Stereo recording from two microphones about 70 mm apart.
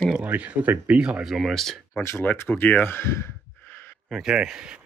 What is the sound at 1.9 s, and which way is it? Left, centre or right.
Speech, left.